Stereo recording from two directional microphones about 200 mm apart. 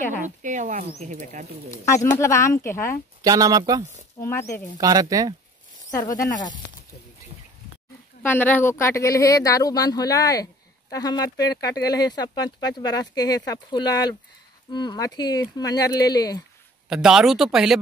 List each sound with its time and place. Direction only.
0.4 s speech: 40° right (ahead or behind)
1.7 s speech: 15° left (ahead or behind)
3.2 s speech: 15° right (ahead or behind)
4.2 s speech: 15° left (ahead or behind)
4.7 s speech: 20° right (ahead or behind)
5.9 s speech: 15° left (ahead or behind)
8.2 s speech: 10° left (ahead or behind)
16.9 s speech: 5° right (ahead or behind)